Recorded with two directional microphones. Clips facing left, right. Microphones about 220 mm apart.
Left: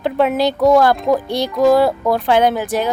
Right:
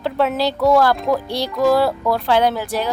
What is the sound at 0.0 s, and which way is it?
Speech, 15° left (ahead or behind).